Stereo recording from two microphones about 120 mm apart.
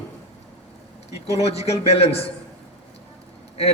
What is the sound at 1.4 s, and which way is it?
Speech, 60° left (ahead or behind).